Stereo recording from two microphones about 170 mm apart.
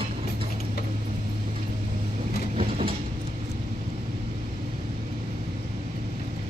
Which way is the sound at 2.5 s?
35° right (ahead or behind).